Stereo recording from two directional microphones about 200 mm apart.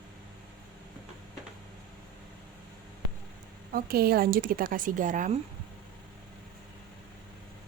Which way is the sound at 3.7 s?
50° right (ahead or behind).